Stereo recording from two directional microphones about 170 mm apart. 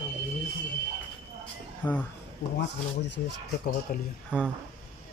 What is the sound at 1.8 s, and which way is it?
Speech, 10° left (ahead or behind).